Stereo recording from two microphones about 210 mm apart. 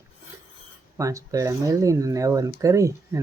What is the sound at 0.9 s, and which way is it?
Speech, 15° right (ahead or behind).